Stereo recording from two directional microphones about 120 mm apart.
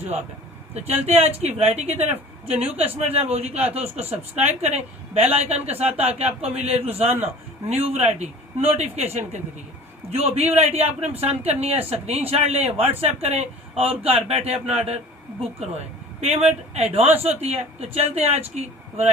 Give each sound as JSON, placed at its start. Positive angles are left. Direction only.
{"t": 0.7, "sound": "speech", "side_deg": -65}
{"t": 10.1, "sound": "speech", "side_deg": -60}